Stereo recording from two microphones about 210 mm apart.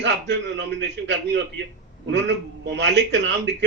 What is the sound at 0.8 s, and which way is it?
A man's voice, 60° right (ahead or behind).